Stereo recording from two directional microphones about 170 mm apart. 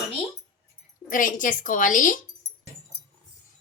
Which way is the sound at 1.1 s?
50° left (ahead or behind).